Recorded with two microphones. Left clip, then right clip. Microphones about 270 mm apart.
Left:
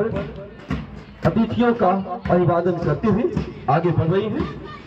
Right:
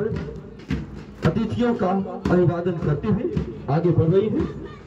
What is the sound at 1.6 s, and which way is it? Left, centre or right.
A man's voice, centre.